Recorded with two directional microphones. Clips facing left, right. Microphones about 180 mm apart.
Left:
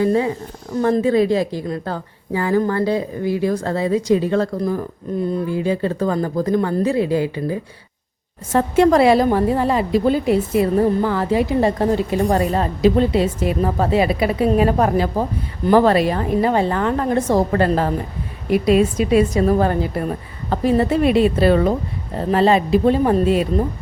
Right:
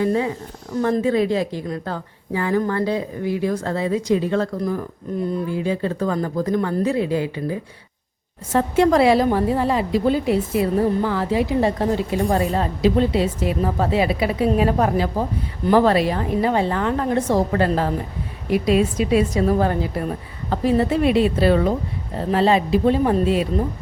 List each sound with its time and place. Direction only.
0.0 s a woman's voice: 35° left (ahead or behind)
8.5 s a woman's voice: 50° left (ahead or behind)